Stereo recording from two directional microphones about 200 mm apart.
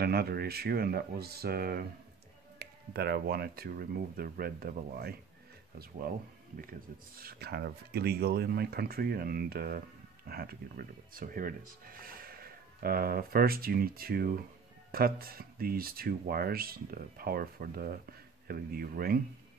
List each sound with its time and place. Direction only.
0.0 s speech: 50° right (ahead or behind)
7.2 s speech: 50° right (ahead or behind)